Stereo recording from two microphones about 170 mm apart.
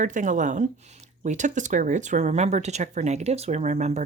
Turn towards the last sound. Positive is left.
turn(degrees=-40)  # may be behind; listen again after turning